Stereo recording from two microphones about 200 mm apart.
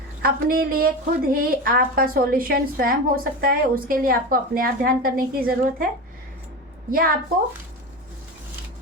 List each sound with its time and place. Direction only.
0.2 s a woman's voice: 50° right (ahead or behind)
6.9 s a woman's voice: 45° right (ahead or behind)